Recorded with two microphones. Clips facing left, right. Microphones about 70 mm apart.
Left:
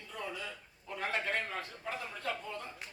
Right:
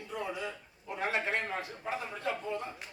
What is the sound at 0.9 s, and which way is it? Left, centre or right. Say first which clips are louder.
Speech: right 3 dB; right.